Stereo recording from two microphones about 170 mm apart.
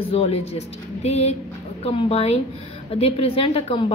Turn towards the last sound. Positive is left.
turn(degrees=35)  # may be behind; listen again after turning